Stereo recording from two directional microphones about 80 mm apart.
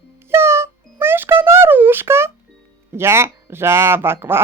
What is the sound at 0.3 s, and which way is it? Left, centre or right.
Music, right.